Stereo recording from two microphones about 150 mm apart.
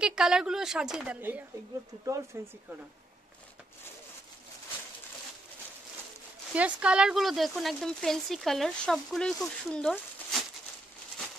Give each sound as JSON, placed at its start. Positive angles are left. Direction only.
{"t": 0.0, "sound": "speech", "side_deg": -5}
{"t": 2.0, "sound": "speech", "side_deg": -20}
{"t": 6.5, "sound": "speech", "side_deg": -10}